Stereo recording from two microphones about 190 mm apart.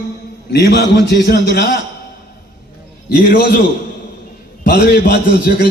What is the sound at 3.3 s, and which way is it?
Speech, 50° left (ahead or behind).